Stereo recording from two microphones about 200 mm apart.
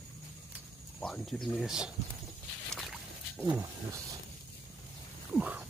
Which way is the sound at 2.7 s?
Centre (ahead or behind).